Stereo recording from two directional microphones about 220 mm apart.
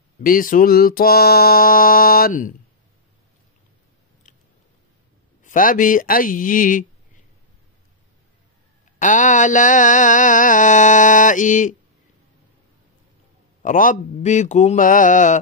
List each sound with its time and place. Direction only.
0.2 s mantra: 40° left (ahead or behind)
5.4 s mantra: 35° left (ahead or behind)
9.0 s mantra: 35° left (ahead or behind)
13.6 s mantra: 35° left (ahead or behind)